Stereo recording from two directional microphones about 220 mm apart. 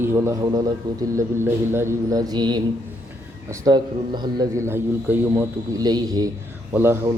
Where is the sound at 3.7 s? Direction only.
20° right (ahead or behind).